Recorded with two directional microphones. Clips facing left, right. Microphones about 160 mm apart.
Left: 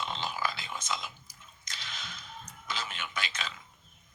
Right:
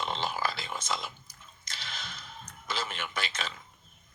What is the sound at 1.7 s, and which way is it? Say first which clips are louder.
Squish: right 2 dB; 30° right (ahead or behind).